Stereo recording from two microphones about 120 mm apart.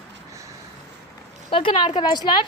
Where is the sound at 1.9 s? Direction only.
35° left (ahead or behind).